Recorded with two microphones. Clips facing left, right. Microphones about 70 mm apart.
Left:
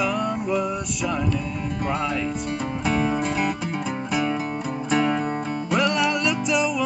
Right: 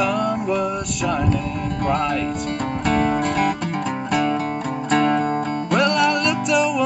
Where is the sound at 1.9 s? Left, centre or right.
Centre.